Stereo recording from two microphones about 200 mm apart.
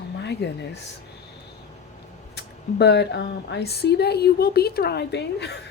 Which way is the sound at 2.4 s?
60° left (ahead or behind).